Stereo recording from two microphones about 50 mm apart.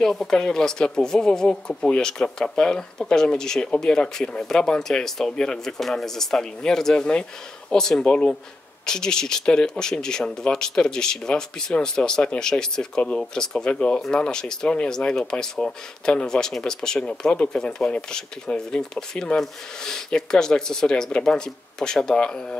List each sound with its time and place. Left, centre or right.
0.0 s speech: centre